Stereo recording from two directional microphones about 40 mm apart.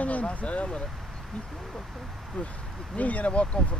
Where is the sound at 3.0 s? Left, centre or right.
Left.